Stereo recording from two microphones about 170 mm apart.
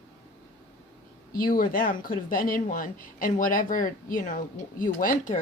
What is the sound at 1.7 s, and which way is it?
Speech, 55° left (ahead or behind).